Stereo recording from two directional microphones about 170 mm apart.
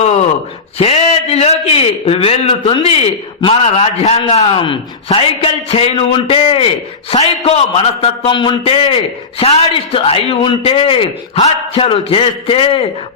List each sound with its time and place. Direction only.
0.8 s a man's voice: 35° left (ahead or behind)